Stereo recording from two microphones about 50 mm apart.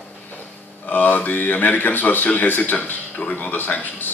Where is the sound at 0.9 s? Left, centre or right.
Left.